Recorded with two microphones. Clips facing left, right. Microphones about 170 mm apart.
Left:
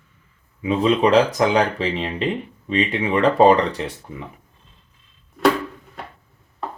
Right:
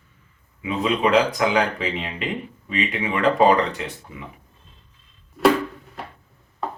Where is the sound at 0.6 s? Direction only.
35° left (ahead or behind).